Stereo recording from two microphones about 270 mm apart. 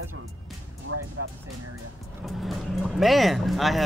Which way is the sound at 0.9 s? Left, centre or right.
Right.